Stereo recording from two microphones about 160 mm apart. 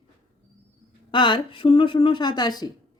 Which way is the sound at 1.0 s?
30° left (ahead or behind).